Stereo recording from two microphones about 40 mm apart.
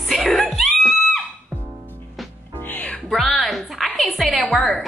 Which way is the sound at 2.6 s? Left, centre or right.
Left.